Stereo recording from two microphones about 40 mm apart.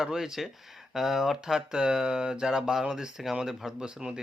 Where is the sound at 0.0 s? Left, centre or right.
Centre.